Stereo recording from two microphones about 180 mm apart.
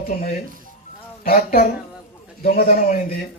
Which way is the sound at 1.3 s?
45° left (ahead or behind).